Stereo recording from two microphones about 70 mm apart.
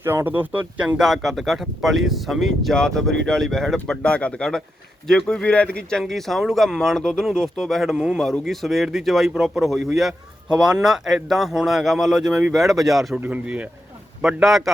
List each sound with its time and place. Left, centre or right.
0.3 s speech: right
0.9 s speech: centre
5.5 s speech: centre
6.0 s speech: centre
13.1 s speech: right
14.4 s speech: centre